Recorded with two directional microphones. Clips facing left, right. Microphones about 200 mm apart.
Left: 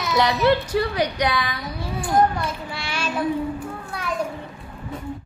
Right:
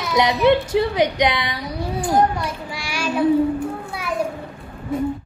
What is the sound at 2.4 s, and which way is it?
Child singing, 10° right (ahead or behind).